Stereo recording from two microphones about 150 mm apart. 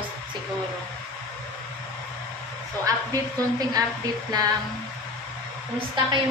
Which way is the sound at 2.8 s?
25° right (ahead or behind).